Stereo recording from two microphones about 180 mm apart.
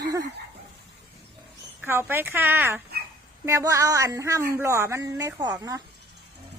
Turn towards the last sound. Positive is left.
turn(degrees=-20)  # may be behind; listen again after turning